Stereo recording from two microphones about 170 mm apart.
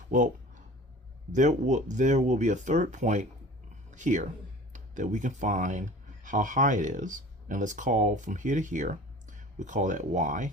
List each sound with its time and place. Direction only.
1.3 s speech: 45° right (ahead or behind)